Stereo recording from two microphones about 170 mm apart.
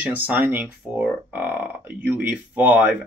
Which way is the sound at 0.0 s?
10° right (ahead or behind).